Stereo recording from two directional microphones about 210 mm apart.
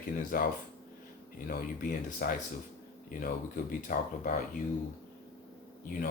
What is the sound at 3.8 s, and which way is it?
Speech, 40° left (ahead or behind).